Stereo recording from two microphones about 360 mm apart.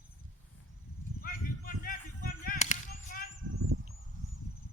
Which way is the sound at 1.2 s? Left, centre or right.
Left.